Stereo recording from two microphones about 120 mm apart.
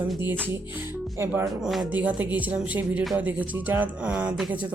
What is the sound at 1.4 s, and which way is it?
Speech, centre (ahead or behind).